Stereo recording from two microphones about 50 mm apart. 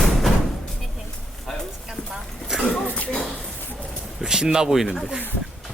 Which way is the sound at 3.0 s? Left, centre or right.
Left.